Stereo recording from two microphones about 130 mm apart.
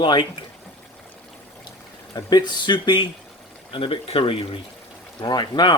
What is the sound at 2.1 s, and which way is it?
A man's voice, 35° left (ahead or behind).